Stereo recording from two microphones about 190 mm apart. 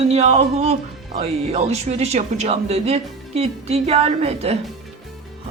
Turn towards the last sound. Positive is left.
turn(degrees=-30)  # may be behind; listen again after turning